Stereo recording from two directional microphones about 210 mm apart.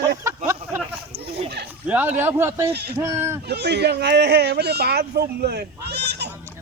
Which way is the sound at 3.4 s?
50° right (ahead or behind).